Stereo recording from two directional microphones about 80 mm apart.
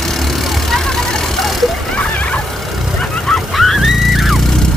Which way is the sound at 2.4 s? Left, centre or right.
Centre.